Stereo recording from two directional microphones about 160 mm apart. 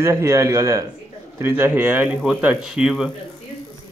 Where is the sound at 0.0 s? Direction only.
20° right (ahead or behind).